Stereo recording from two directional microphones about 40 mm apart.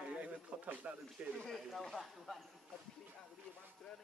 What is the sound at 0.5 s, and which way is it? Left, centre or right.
Speech, right.